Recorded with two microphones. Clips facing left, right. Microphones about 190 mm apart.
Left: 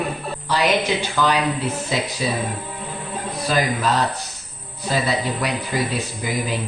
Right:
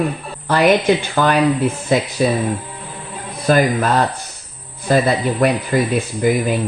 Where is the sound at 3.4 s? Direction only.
55° right (ahead or behind).